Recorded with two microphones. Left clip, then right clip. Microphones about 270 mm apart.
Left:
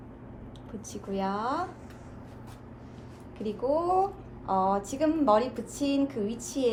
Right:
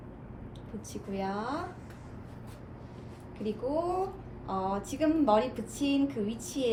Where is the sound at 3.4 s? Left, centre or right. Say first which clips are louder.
Left 4 dB; centre.